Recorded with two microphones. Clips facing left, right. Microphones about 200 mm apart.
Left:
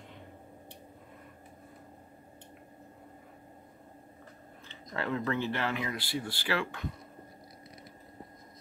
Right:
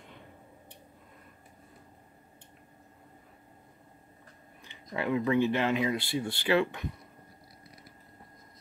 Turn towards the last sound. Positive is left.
turn(degrees=-20)  # may be behind; listen again after turning